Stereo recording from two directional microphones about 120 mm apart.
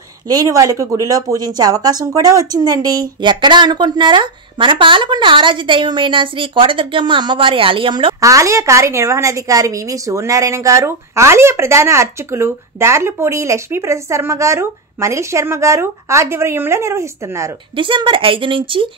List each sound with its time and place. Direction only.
0.3 s speech: 30° right (ahead or behind); by 8.1 s 45° right (ahead or behind)
8.2 s a woman's voice: 25° right (ahead or behind)
17.7 s speech: 45° right (ahead or behind)